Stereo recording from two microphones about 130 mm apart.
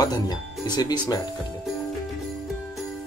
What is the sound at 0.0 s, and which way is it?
Speech, 30° left (ahead or behind).